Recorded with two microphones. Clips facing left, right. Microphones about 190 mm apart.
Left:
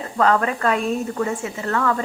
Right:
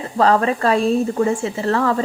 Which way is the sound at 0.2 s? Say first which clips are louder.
Right 3 dB; 30° right (ahead or behind).